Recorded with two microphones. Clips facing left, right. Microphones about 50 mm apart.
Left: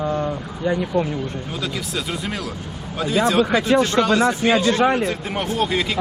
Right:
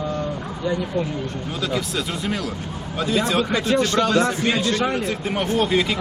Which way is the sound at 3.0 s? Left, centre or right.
Centre.